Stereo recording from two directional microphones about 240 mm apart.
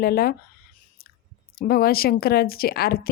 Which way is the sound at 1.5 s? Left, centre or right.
Left.